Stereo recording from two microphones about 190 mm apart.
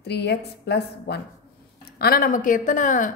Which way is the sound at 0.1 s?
60° left (ahead or behind).